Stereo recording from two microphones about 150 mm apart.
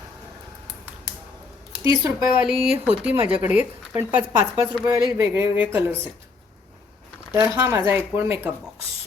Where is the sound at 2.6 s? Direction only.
10° right (ahead or behind).